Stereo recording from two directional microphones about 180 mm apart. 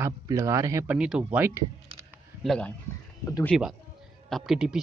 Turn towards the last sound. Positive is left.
turn(degrees=-5)  # may be behind; listen again after turning